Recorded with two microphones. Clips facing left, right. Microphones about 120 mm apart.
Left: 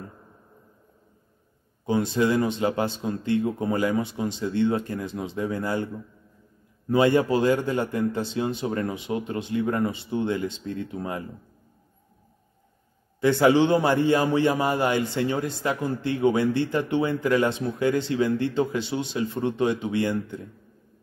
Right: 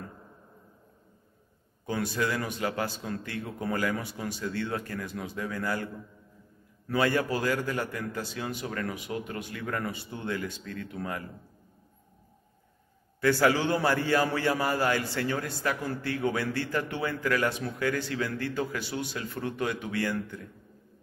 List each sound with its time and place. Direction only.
1.9 s a man's voice: 20° left (ahead or behind)
13.2 s a man's voice: 20° left (ahead or behind)